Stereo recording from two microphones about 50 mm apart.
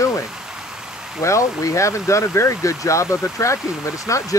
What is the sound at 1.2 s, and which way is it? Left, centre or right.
Speech, left.